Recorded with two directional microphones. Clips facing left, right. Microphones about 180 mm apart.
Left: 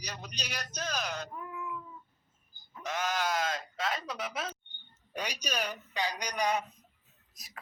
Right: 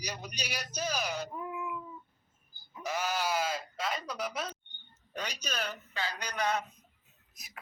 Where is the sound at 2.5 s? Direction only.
10° right (ahead or behind).